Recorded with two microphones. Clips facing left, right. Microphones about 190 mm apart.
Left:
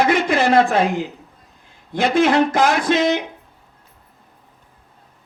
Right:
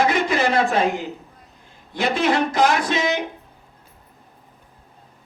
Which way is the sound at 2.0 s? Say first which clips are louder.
Left 5 dB; 50° left (ahead or behind).